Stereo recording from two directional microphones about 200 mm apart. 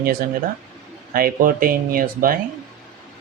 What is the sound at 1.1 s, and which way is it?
Speech, 45° right (ahead or behind).